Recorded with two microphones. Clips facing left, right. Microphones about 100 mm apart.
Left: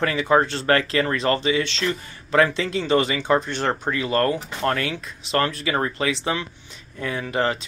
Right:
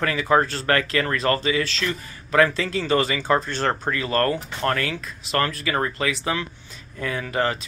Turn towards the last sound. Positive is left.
turn(degrees=25)  # may be behind; listen again after turning